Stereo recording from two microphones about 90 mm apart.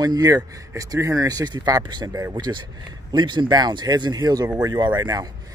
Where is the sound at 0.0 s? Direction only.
45° right (ahead or behind).